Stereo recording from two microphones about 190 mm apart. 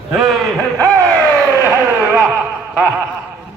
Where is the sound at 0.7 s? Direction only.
15° right (ahead or behind).